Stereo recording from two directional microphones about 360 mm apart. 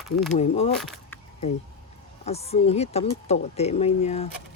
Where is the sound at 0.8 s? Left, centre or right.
Centre.